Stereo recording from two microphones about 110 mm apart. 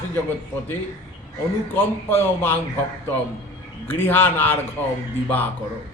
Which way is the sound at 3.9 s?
20° left (ahead or behind).